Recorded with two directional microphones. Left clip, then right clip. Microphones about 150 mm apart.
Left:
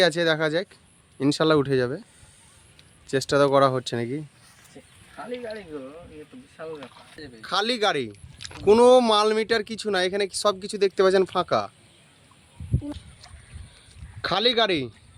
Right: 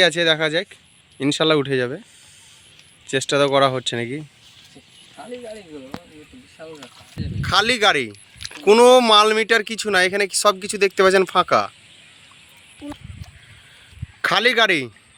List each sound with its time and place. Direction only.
0.0 s speech: 10° right (ahead or behind)
3.1 s speech: 10° right (ahead or behind)
14.2 s speech: 10° right (ahead or behind)